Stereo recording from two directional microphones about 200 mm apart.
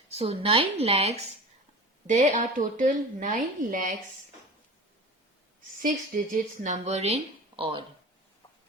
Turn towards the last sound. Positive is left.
turn(degrees=-25)  # may be behind; listen again after turning